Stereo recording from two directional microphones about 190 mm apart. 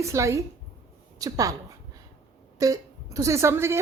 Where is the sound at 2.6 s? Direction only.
20° right (ahead or behind).